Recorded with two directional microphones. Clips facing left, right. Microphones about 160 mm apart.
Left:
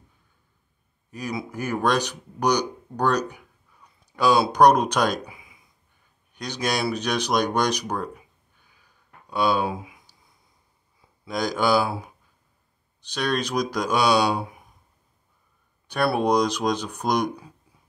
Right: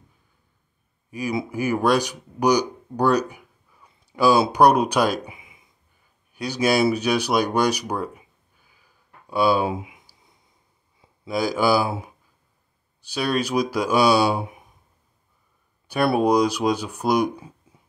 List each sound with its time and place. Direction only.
1.1 s speech: 10° right (ahead or behind)
5.2 s a sound: 20° right (ahead or behind)
6.3 s speech: 5° right (ahead or behind)
9.3 s speech: 5° right (ahead or behind)
9.7 s speech: 20° right (ahead or behind)
11.2 s speech: 5° right (ahead or behind)
13.0 s speech: 5° right (ahead or behind)
16.2 s speech: 5° right (ahead or behind)